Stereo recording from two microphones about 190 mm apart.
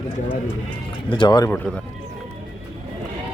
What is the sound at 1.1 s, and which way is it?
Speech, 25° left (ahead or behind).